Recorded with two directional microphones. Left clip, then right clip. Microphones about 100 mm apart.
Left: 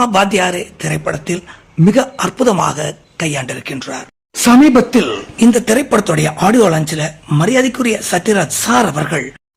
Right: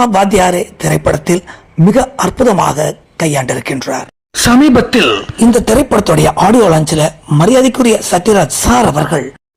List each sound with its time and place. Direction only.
0.0 s speech: 25° right (ahead or behind)
0.9 s speech: 55° right (ahead or behind)
1.9 s speech: 25° right (ahead or behind)
3.4 s speech: 50° right (ahead or behind); by 9.0 s 35° right (ahead or behind)
9.0 s speech: 15° right (ahead or behind)